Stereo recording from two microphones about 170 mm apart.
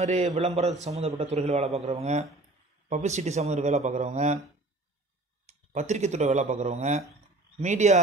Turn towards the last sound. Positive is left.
turn(degrees=-45)  # may be behind; listen again after turning